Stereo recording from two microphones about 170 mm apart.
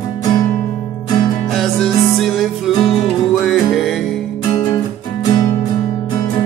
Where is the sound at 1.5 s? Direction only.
Centre (ahead or behind).